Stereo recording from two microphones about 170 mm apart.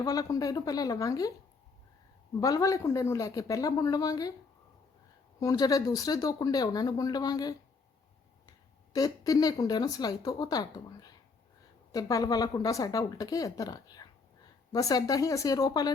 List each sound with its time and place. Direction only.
0.0 s speech: 20° left (ahead or behind)
2.4 s speech: 20° left (ahead or behind)
5.4 s speech: 20° left (ahead or behind)
8.9 s speech: 20° left (ahead or behind)